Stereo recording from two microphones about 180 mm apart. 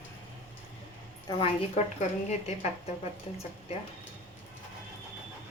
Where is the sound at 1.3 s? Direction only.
35° left (ahead or behind).